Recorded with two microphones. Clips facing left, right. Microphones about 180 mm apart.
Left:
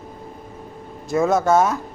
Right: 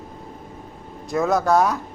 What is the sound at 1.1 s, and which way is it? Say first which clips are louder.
Speech: left 2 dB; centre (ahead or behind).